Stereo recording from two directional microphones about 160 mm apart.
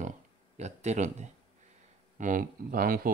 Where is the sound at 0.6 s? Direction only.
45° right (ahead or behind).